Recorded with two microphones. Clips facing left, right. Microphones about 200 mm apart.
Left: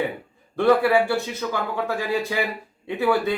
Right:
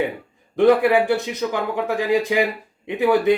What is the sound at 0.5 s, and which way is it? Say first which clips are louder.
Speech: right 3 dB; 15° right (ahead or behind).